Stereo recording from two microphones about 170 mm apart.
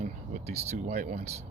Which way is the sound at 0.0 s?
40° right (ahead or behind).